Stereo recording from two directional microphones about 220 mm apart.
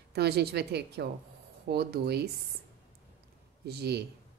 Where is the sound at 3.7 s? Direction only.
45° right (ahead or behind).